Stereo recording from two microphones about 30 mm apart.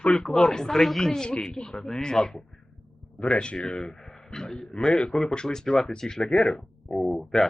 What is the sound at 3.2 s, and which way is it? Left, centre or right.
Speech, left.